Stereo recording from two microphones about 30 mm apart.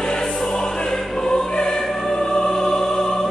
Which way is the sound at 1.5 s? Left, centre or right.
Left.